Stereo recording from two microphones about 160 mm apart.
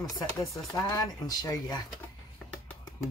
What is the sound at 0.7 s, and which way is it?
Speech, 20° left (ahead or behind).